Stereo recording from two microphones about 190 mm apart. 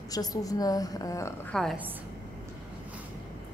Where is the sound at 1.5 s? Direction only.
Centre (ahead or behind).